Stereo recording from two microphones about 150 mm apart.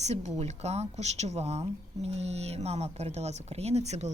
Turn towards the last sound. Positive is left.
turn(degrees=-50)  # may be behind; listen again after turning